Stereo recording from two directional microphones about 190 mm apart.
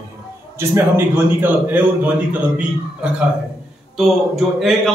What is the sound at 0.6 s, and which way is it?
A man's voice, 10° right (ahead or behind).